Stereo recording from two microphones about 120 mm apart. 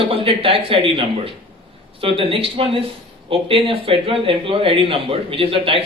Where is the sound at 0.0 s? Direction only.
50° right (ahead or behind).